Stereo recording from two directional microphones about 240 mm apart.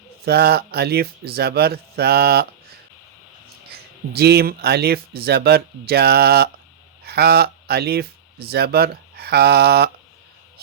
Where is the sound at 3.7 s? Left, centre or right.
Right.